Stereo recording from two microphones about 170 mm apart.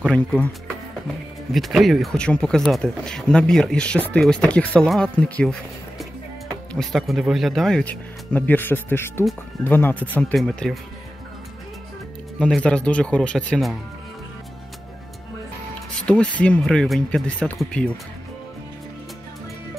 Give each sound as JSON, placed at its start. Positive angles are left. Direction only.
{"t": 0.0, "sound": "speech", "side_deg": 5}
{"t": 12.4, "sound": "speech", "side_deg": 5}
{"t": 15.9, "sound": "speech", "side_deg": 5}